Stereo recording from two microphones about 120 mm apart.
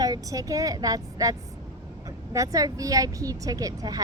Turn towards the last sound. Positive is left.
turn(degrees=-30)  # may be behind; listen again after turning